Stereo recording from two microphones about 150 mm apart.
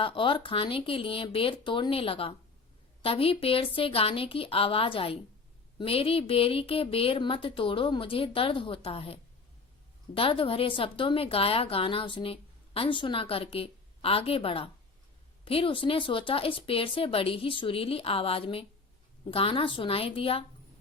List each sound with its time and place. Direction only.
0.0 s a woman's voice: 35° left (ahead or behind)
10.2 s a woman's voice: 35° left (ahead or behind)